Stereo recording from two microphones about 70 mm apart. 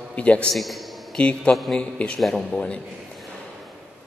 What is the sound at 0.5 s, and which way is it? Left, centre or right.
Speech, centre.